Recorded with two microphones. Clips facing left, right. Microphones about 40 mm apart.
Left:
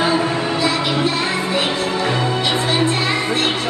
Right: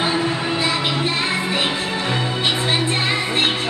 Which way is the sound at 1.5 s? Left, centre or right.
Right.